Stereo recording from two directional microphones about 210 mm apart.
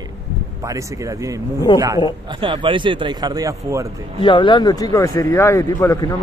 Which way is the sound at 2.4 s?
25° right (ahead or behind).